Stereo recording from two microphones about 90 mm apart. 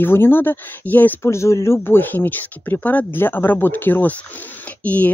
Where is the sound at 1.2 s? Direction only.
30° left (ahead or behind).